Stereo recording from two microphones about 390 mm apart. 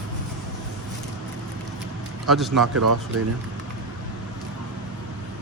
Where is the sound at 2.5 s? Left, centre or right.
Right.